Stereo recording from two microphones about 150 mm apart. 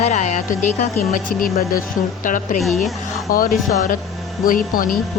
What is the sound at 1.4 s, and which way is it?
Speech, 70° left (ahead or behind).